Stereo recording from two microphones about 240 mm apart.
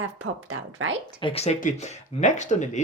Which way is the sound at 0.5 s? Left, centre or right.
Right.